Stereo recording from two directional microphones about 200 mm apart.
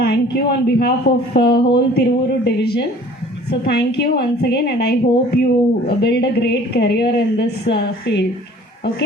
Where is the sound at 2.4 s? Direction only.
55° left (ahead or behind).